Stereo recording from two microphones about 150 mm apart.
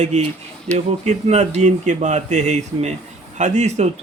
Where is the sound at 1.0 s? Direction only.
50° right (ahead or behind).